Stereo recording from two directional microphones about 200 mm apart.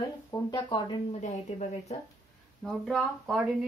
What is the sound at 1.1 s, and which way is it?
Speech, 35° left (ahead or behind).